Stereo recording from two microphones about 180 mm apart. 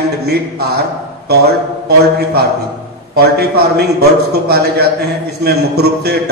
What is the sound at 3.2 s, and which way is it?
A man's voice, 60° right (ahead or behind).